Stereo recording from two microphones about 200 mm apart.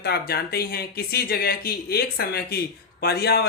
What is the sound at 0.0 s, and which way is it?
Speech, 50° left (ahead or behind).